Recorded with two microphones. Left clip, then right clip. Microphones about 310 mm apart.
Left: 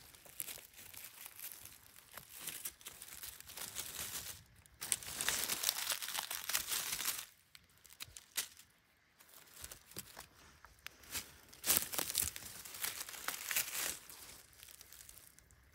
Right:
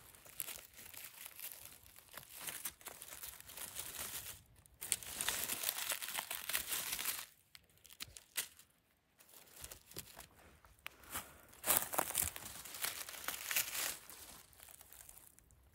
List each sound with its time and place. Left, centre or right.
0.4 s crumpling: centre
9.6 s a sound: centre
10.8 s crumpling: centre